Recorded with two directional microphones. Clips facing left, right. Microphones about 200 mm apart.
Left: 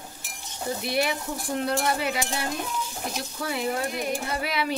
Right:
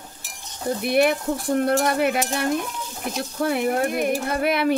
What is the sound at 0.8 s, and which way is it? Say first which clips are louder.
Speech: right 9 dB; 55° right (ahead or behind).